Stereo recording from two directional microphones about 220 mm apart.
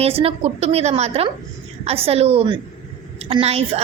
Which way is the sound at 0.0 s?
25° right (ahead or behind).